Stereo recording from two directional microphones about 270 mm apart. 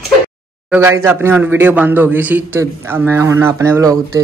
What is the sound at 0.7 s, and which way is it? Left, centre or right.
A man's voice, centre.